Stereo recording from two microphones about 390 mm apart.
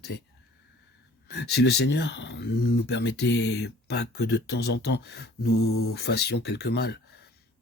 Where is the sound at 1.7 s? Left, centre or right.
Left.